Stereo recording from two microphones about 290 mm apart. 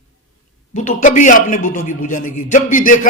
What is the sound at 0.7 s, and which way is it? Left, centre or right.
A man's voice, left.